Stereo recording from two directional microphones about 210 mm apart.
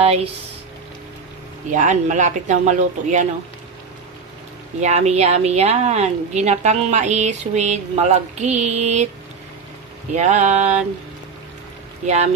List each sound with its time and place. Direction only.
0.0 s speech: 30° right (ahead or behind)
1.7 s a woman's voice: 35° right (ahead or behind)
4.7 s a woman's voice: 35° right (ahead or behind)
10.1 s a woman's voice: 35° right (ahead or behind)